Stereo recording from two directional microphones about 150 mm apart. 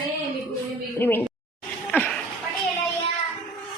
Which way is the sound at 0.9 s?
15° left (ahead or behind).